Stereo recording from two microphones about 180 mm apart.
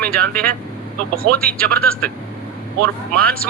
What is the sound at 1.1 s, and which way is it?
Speech, 55° right (ahead or behind).